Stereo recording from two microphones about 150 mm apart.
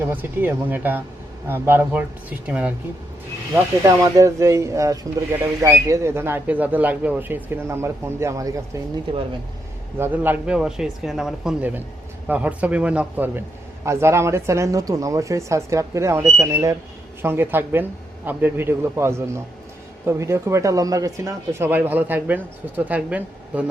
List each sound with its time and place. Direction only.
0.0 s speech: 15° right (ahead or behind)
3.8 s speech: 20° right (ahead or behind)
9.1 s speech: 35° right (ahead or behind)
10.0 s speech: 10° right (ahead or behind)